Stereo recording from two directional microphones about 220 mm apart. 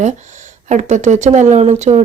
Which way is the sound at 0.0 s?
35° right (ahead or behind).